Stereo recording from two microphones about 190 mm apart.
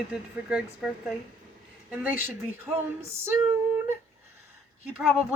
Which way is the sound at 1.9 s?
10° right (ahead or behind).